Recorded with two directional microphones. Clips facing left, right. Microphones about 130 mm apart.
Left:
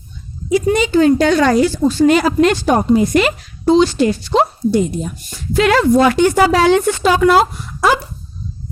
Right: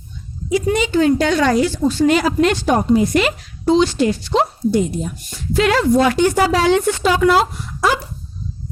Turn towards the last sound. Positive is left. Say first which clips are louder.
# left 3 dB
turn(degrees=55)  # may be behind; listen again after turning